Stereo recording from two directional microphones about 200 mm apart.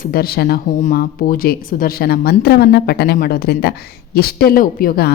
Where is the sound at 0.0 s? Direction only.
50° left (ahead or behind).